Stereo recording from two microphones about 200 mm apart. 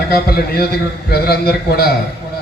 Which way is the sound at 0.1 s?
50° left (ahead or behind).